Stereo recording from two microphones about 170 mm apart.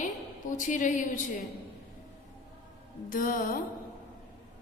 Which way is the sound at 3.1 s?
50° left (ahead or behind).